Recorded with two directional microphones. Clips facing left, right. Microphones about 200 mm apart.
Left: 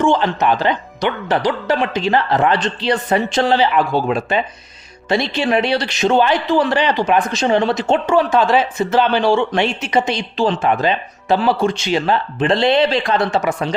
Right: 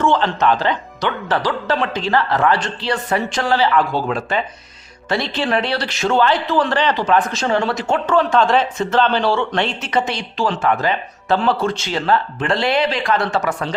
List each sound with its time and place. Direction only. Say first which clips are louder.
0.0 s a man's voice: left 1 dB; 15° left (ahead or behind)